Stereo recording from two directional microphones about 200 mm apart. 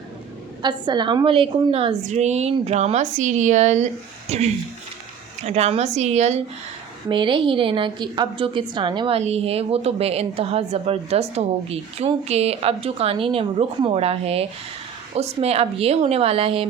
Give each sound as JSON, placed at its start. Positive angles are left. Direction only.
{"t": 0.6, "sound": "a woman's voice", "side_deg": -20}